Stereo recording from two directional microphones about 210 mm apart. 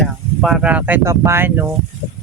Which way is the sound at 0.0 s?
Centre (ahead or behind).